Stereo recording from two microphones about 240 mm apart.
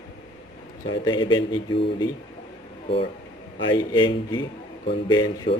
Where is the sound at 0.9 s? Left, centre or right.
Centre.